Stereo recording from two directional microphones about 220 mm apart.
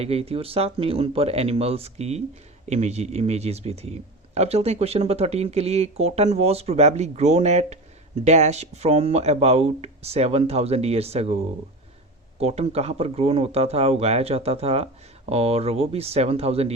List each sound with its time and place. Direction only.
0.0 s speech: 25° right (ahead or behind)
12.4 s speech: 30° right (ahead or behind)